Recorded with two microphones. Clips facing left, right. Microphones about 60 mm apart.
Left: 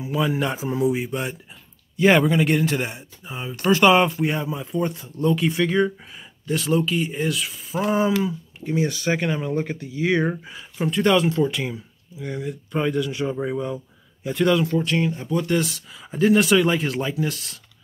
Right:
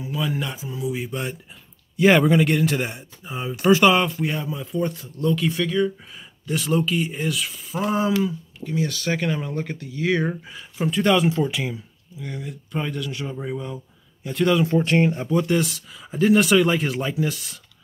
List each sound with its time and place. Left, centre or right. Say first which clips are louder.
0.0 s a sound: left 4 dB; centre
0.6 s a sound: left 8 dB; left
0.9 s speech: left 2 dB; centre
3.9 s speech: left 3 dB; centre
6.1 s speech: left 1 dB; centre
8.5 s speech: left 4 dB; left; by 14.6 s centre
14.7 s speech: right 3 dB; right
15.2 s speech: right 1 dB; centre